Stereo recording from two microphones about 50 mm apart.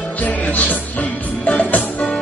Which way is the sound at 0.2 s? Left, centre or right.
Left.